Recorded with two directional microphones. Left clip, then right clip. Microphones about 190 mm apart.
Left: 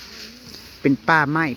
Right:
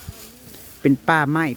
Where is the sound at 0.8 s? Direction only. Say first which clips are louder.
Even; 25° right (ahead or behind).